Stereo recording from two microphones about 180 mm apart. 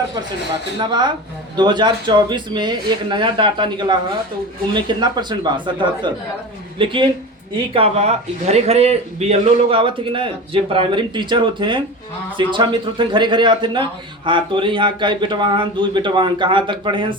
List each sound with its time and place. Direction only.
0.8 s a man's voice: 25° right (ahead or behind)
6.7 s a man's voice: 30° right (ahead or behind)